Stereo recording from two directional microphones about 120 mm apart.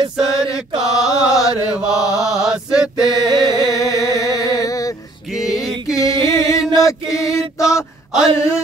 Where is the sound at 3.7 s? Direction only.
30° left (ahead or behind).